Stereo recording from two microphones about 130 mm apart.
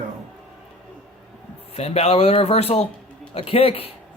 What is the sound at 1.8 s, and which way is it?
Speech, 55° left (ahead or behind).